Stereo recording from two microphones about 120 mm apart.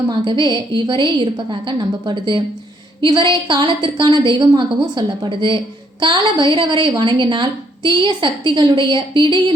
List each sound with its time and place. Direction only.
0.1 s a woman's voice: 40° right (ahead or behind)